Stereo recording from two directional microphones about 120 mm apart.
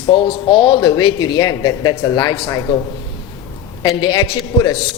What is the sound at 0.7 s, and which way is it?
Speech, 30° left (ahead or behind).